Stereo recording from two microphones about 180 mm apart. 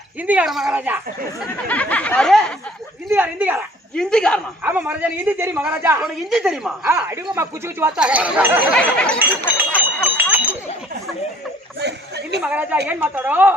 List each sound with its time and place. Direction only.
0.2 s speech: 10° right (ahead or behind)
1.6 s a sound: 10° left (ahead or behind)
3.1 s speech: 10° right (ahead or behind)
3.9 s a woman's voice: 5° left (ahead or behind)
4.6 s speech: 10° right (ahead or behind)
6.0 s a woman's voice: centre (ahead or behind)
6.8 s speech: 15° right (ahead or behind)
9.1 s a sound: 10° right (ahead or behind)
11.8 s a sound: 70° right (ahead or behind)
12.4 s speech: 10° right (ahead or behind)